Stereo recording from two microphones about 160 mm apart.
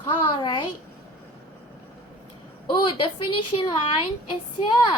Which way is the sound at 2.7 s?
30° left (ahead or behind).